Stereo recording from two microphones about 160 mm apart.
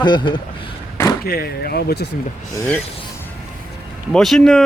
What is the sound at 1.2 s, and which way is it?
Speech, 70° left (ahead or behind).